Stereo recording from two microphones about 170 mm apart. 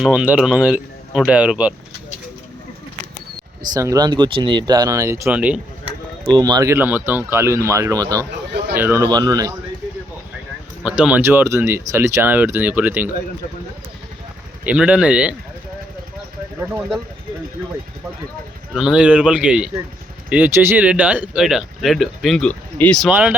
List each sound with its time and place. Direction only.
0.0 s speech: 5° right (ahead or behind)
3.8 s speech: 20° right (ahead or behind)
6.3 s speech: 25° right (ahead or behind)
10.8 s speech: 5° right (ahead or behind)
14.6 s speech: 10° right (ahead or behind)
18.7 s speech: 5° right (ahead or behind)
23.0 s speech: 10° right (ahead or behind)